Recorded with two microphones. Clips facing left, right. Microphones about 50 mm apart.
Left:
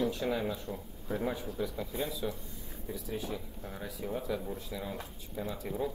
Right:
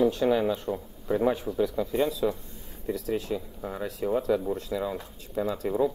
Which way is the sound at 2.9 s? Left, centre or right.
Right.